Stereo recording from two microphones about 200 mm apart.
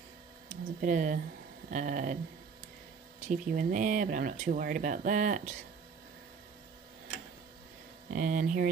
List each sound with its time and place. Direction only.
0.5 s speech: 40° right (ahead or behind)
3.3 s speech: 40° right (ahead or behind)
8.1 s speech: 40° right (ahead or behind)